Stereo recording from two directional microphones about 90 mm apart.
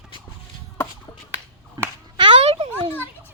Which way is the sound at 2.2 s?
75° right (ahead or behind).